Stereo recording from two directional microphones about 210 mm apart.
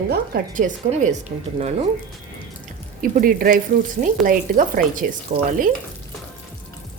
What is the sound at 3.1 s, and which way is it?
A woman's voice, 45° right (ahead or behind).